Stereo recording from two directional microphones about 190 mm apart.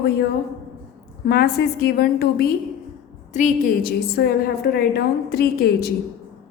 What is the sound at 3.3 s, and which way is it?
A woman's voice, 40° left (ahead or behind).